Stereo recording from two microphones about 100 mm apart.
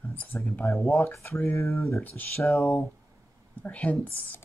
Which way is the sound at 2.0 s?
20° left (ahead or behind).